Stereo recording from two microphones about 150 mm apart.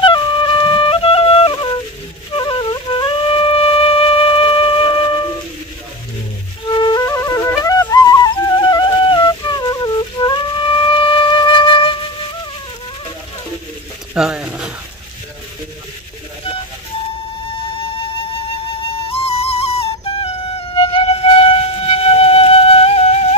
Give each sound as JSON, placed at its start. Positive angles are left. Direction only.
{"t": 0.0, "sound": "flute", "side_deg": 30}
{"t": 6.7, "sound": "flute", "side_deg": 30}
{"t": 14.1, "sound": "a sound", "side_deg": -5}
{"t": 18.8, "sound": "music", "side_deg": 40}